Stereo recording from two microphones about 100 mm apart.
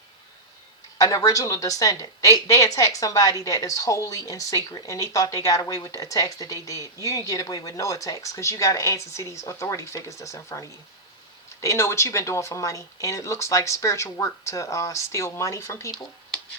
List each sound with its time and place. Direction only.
0.9 s a woman's voice: 35° left (ahead or behind)